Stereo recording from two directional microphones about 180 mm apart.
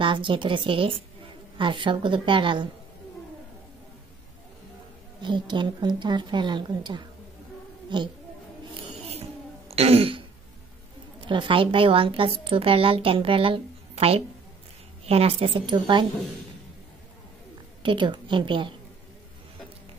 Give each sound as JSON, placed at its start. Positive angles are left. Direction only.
{"t": 0.0, "sound": "a woman's voice", "side_deg": -25}
{"t": 5.2, "sound": "a woman's voice", "side_deg": -25}
{"t": 9.7, "sound": "throat clearing", "side_deg": -35}
{"t": 11.2, "sound": "a woman's voice", "side_deg": -25}
{"t": 17.8, "sound": "a woman's voice", "side_deg": -25}